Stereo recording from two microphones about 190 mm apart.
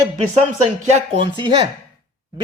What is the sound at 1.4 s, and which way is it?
Speech, 25° right (ahead or behind).